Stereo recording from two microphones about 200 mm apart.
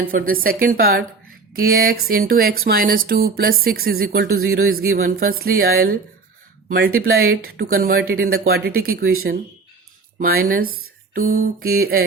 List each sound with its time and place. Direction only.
0.0 s speech: 45° right (ahead or behind)
10.2 s speech: 45° right (ahead or behind)